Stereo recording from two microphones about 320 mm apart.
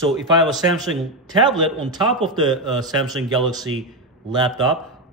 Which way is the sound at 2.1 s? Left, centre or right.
Centre.